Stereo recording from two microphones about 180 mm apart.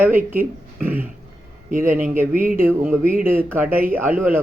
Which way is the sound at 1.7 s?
45° right (ahead or behind).